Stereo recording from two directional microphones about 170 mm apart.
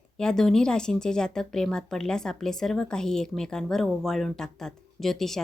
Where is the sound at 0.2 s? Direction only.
5° left (ahead or behind).